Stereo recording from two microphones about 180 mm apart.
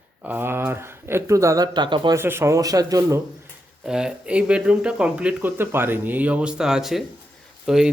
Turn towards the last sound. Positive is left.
turn(degrees=0)  # may be behind; listen again after turning